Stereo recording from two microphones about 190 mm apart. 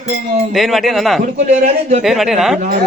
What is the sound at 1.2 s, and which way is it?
Speech, 35° right (ahead or behind).